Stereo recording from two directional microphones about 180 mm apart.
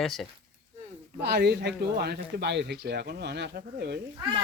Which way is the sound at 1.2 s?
65° right (ahead or behind).